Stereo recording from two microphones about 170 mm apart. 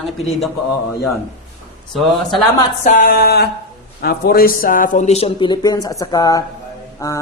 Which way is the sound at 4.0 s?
65° left (ahead or behind).